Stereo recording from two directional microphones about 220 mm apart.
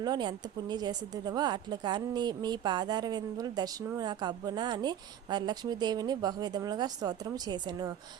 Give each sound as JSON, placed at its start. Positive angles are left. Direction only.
{"t": 0.0, "sound": "speech", "side_deg": -20}